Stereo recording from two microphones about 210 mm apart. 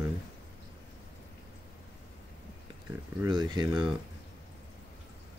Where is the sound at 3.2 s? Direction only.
20° right (ahead or behind).